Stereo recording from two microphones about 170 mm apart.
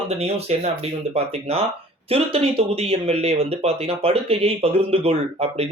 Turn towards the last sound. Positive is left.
turn(degrees=-35)  # may be behind; listen again after turning